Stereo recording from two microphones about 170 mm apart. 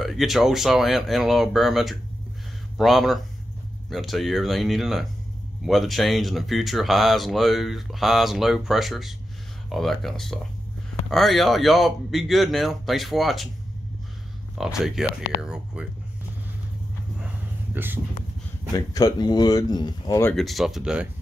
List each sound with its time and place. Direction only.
0.0 s speech: centre (ahead or behind)
14.6 s speech: 5° right (ahead or behind)
17.7 s speech: 10° right (ahead or behind)
18.9 s speech: 25° left (ahead or behind)
20.2 s speech: centre (ahead or behind)